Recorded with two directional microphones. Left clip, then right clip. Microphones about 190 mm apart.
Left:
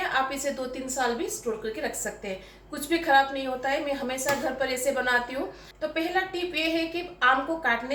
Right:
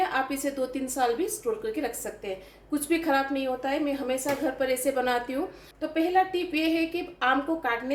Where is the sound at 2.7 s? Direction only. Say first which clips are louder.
Left 3 dB; 40° right (ahead or behind).